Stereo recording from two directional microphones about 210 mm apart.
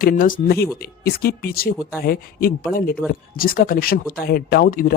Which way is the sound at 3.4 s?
45° left (ahead or behind).